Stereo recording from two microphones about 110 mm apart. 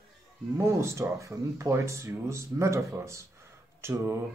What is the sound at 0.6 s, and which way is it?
Speech, 25° right (ahead or behind).